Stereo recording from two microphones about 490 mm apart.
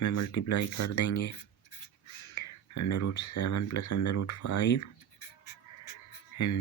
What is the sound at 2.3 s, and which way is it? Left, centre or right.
Speech, left.